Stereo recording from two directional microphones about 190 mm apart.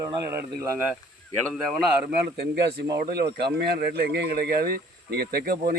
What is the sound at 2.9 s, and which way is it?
Speech, 60° right (ahead or behind).